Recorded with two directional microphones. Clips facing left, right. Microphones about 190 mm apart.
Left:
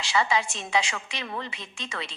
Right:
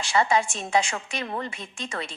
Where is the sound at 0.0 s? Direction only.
50° right (ahead or behind).